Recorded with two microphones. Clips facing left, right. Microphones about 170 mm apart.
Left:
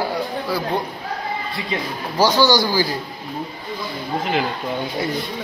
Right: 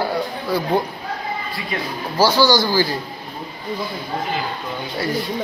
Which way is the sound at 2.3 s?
15° left (ahead or behind).